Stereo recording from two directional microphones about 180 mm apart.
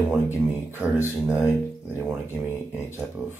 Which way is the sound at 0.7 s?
15° left (ahead or behind).